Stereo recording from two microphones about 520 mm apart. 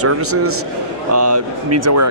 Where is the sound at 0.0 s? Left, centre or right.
Right.